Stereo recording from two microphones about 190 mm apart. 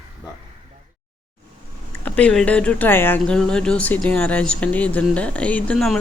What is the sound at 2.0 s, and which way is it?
A woman's voice, 5° left (ahead or behind).